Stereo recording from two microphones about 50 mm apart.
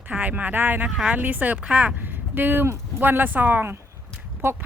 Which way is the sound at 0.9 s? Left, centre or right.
Centre.